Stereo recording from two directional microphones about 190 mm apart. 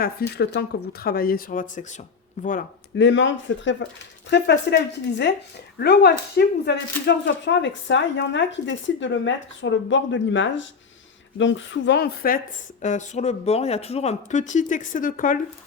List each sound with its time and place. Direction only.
0.0 s speech: 55° left (ahead or behind)
2.9 s speech: 70° left (ahead or behind); by 12.4 s 55° left (ahead or behind)
12.8 s speech: 40° left (ahead or behind)